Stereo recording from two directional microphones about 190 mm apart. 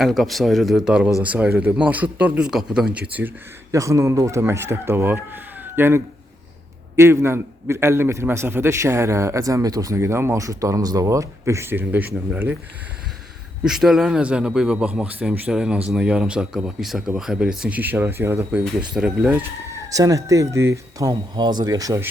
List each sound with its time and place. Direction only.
0.0 s a man's voice: centre (ahead or behind)
13.7 s speech: 5° right (ahead or behind)
19.9 s a man's voice: 15° right (ahead or behind)